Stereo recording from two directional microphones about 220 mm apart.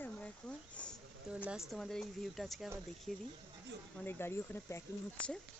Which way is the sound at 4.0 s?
10° left (ahead or behind).